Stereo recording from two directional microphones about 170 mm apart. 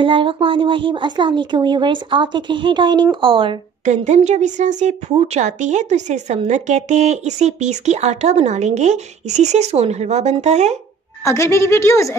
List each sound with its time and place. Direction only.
0.0 s speech: 30° right (ahead or behind)
3.8 s speech: 45° right (ahead or behind)
11.2 s a woman's voice: 15° left (ahead or behind)